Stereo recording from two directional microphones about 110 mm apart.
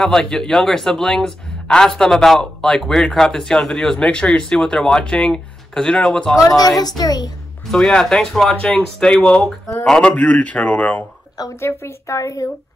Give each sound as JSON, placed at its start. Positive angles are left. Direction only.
{"t": 0.0, "sound": "a man's voice", "side_deg": 5}
{"t": 6.3, "sound": "speech", "side_deg": 30}
{"t": 7.7, "sound": "a man's voice", "side_deg": 5}